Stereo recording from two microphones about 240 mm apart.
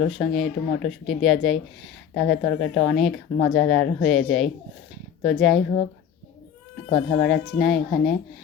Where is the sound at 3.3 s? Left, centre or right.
Left.